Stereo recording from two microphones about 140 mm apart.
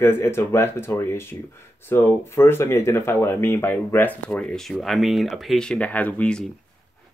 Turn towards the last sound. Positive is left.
turn(degrees=10)  # may be behind; listen again after turning